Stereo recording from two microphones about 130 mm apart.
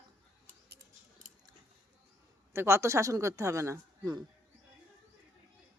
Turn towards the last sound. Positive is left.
turn(degrees=-25)  # may be behind; listen again after turning